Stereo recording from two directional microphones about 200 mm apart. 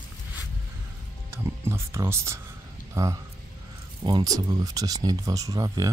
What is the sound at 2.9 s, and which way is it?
Speech, 15° right (ahead or behind).